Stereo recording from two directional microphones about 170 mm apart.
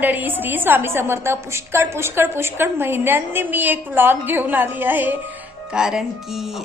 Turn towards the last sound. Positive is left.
turn(degrees=-5)  # may be behind; listen again after turning